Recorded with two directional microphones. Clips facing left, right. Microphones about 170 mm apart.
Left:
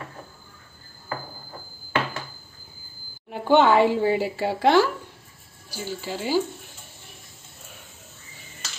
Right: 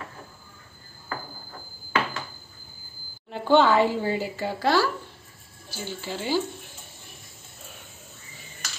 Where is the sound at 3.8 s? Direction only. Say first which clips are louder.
Left 4 dB; 70° left (ahead or behind).